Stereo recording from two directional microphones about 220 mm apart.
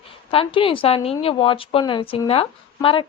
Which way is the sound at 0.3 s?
25° left (ahead or behind).